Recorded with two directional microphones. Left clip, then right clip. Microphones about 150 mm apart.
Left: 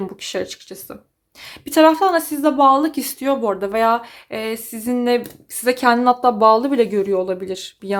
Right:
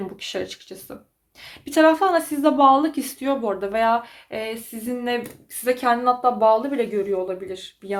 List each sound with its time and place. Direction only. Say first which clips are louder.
0.2 s a woman's voice: left 4 dB; 40° left (ahead or behind)
5.6 s speech: left 4 dB; 60° left (ahead or behind)